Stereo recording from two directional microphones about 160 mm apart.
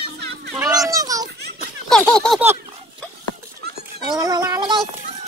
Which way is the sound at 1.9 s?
5° left (ahead or behind).